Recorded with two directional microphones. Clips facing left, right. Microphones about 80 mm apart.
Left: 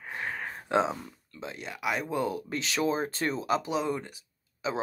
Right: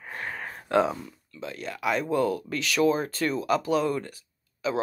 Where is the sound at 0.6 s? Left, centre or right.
Left.